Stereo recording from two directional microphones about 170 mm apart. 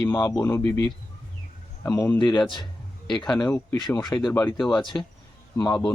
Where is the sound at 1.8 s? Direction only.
15° left (ahead or behind).